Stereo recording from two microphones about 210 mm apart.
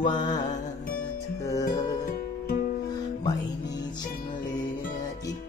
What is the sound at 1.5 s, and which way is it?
Music, 15° left (ahead or behind).